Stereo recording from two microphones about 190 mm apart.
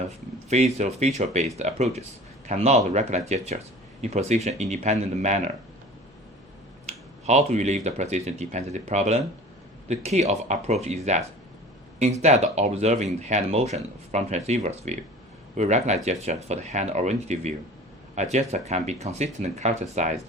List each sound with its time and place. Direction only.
0.8 s speech: 35° right (ahead or behind)
6.8 s speech: 35° right (ahead or behind)
12.2 s speech: 35° right (ahead or behind)